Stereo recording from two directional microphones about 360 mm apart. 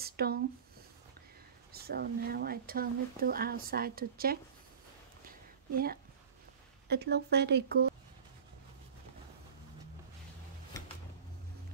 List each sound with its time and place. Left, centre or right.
0.0 s a sound: right
1.7 s speech: right
5.7 s speech: right